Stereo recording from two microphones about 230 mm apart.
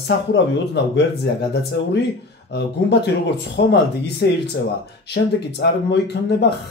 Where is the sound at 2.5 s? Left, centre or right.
Left.